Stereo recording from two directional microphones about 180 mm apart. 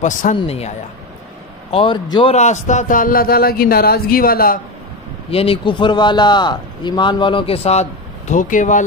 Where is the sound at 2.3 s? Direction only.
40° left (ahead or behind).